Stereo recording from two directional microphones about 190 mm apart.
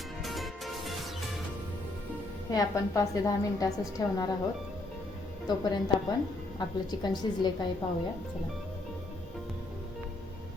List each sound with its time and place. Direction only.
0.2 s music: centre (ahead or behind)
2.5 s a woman's voice: 20° left (ahead or behind)
5.5 s a woman's voice: 20° left (ahead or behind)